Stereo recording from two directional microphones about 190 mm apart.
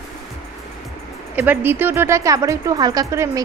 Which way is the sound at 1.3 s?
10° right (ahead or behind).